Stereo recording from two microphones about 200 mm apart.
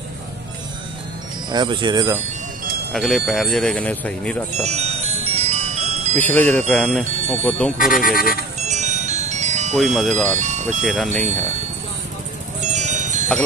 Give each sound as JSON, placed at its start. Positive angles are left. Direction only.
{"t": 1.5, "sound": "speech", "side_deg": -25}
{"t": 2.9, "sound": "speech", "side_deg": 0}
{"t": 4.6, "sound": "music", "side_deg": -30}
{"t": 6.1, "sound": "wind chime", "side_deg": 10}
{"t": 6.7, "sound": "speech", "side_deg": 0}
{"t": 7.7, "sound": "speech", "side_deg": 45}
{"t": 8.6, "sound": "music", "side_deg": -35}
{"t": 9.8, "sound": "speech", "side_deg": 0}
{"t": 10.4, "sound": "music", "side_deg": -35}
{"t": 10.8, "sound": "speech", "side_deg": 0}
{"t": 12.7, "sound": "music", "side_deg": -35}